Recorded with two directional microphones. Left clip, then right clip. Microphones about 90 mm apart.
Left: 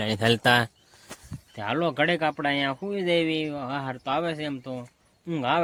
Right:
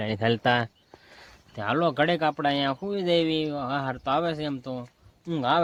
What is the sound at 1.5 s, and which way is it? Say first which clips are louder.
Speech: right 2 dB; 35° right (ahead or behind).